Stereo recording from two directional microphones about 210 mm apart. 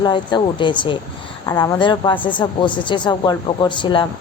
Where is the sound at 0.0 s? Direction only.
20° left (ahead or behind).